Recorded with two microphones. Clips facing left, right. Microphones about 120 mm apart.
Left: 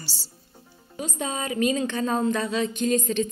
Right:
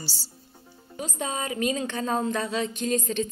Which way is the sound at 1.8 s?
10° right (ahead or behind).